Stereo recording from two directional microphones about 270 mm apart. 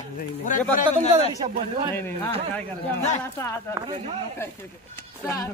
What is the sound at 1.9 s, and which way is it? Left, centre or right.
Speech, centre.